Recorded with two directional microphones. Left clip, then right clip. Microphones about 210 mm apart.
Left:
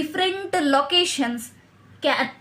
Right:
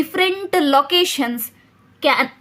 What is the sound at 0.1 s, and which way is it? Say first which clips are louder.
A woman's voice: right 3 dB; 45° right (ahead or behind).